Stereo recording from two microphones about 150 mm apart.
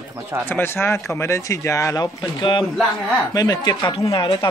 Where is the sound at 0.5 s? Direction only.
15° left (ahead or behind).